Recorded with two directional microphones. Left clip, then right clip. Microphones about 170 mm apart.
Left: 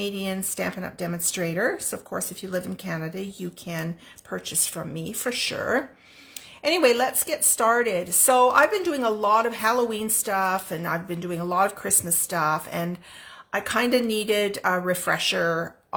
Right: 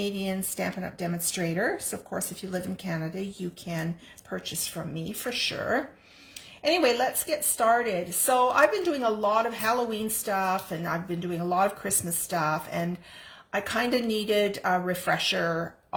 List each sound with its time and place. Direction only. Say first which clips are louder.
0.0 s a woman's voice: left 2 dB; 25° left (ahead or behind)